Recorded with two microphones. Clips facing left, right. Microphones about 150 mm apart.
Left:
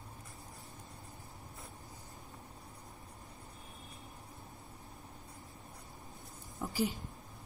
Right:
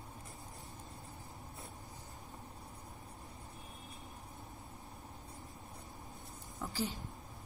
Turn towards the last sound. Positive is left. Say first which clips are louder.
# left 3 dB
turn(degrees=15)  # may be behind; listen again after turning